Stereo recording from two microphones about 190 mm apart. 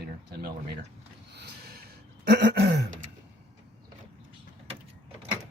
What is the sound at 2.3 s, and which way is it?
Speech, 65° right (ahead or behind).